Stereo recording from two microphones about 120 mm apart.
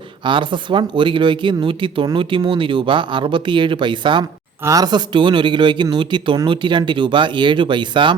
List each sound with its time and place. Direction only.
0.3 s speech: 40° right (ahead or behind)
4.6 s speech: 30° right (ahead or behind)